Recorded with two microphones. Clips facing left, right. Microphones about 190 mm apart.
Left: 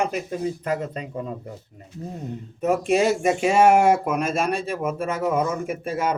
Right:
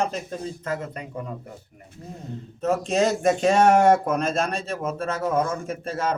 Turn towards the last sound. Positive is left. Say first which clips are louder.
# left 2 dB
turn(degrees=10)  # may be behind; listen again after turning